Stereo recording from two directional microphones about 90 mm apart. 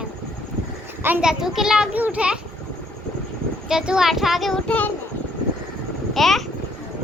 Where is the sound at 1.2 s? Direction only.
5° right (ahead or behind).